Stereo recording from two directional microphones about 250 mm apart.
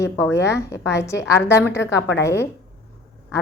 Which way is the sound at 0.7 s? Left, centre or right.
Left.